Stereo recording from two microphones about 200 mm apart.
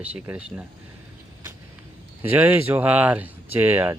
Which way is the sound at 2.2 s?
10° right (ahead or behind).